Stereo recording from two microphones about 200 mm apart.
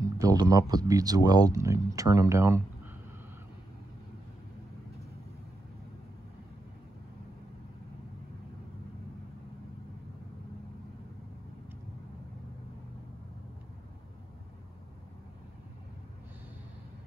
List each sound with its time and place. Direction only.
0.2 s speech: 20° right (ahead or behind)